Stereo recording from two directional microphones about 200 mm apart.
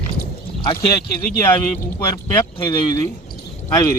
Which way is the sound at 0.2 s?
50° left (ahead or behind).